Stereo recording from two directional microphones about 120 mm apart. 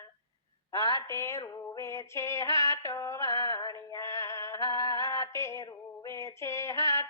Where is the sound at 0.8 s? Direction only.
30° left (ahead or behind).